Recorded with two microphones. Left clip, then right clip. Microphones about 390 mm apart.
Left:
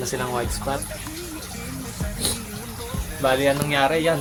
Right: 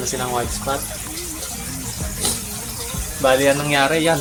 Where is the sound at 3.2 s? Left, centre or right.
Left.